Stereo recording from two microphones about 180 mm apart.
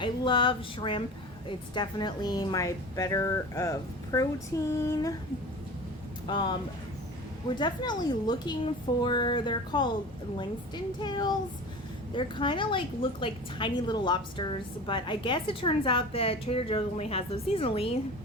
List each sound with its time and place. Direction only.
0.0 s a woman's voice: 25° left (ahead or behind)
6.2 s a woman's voice: 25° left (ahead or behind)
11.0 s a woman's voice: 25° left (ahead or behind)